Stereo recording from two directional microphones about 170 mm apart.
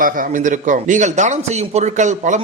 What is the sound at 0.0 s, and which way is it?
A man's voice, 50° right (ahead or behind).